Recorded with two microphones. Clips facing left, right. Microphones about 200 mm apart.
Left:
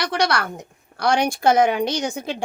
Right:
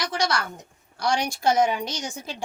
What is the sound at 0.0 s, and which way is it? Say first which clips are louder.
A woman's voice: left 4 dB; 65° left (ahead or behind).